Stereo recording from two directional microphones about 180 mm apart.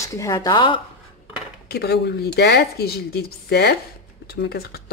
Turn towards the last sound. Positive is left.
turn(degrees=60)  # may be behind; listen again after turning